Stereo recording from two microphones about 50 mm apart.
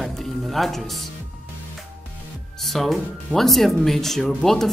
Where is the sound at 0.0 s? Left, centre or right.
Centre.